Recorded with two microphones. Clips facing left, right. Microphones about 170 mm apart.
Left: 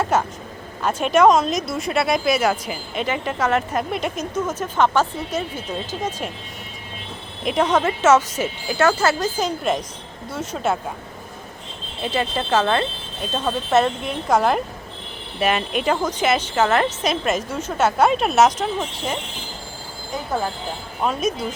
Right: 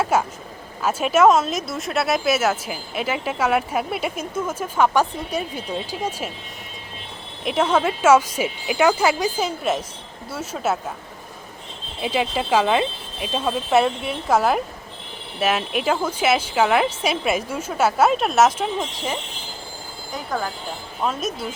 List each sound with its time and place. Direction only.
0.0 s speech: 10° right (ahead or behind)
7.4 s speech: 5° right (ahead or behind)
12.0 s speech: 10° right (ahead or behind)
21.0 s speech: centre (ahead or behind)